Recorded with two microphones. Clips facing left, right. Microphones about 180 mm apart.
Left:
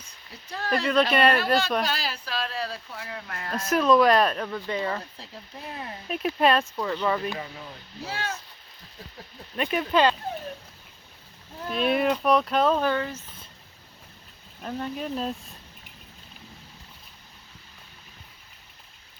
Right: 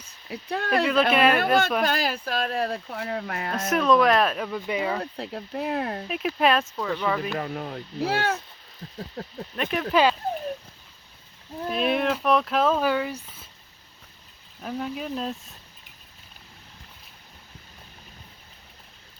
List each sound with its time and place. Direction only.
0.3 s speech: 60° right (ahead or behind)
1.1 s speech: 5° right (ahead or behind)
1.8 s speech: 55° right (ahead or behind)
3.5 s speech: centre (ahead or behind)
5.1 s speech: 65° right (ahead or behind)
6.1 s speech: centre (ahead or behind)
7.3 s speech: 60° right (ahead or behind)
9.6 s speech: centre (ahead or behind)
11.7 s speech: centre (ahead or behind)
14.6 s speech: 5° right (ahead or behind)